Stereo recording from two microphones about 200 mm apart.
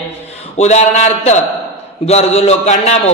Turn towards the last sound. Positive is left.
turn(degrees=35)  # may be behind; listen again after turning